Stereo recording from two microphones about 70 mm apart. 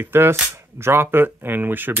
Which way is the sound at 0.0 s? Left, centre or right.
Right.